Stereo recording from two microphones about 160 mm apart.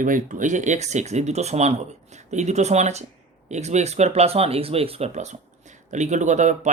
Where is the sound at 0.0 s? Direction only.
55° right (ahead or behind).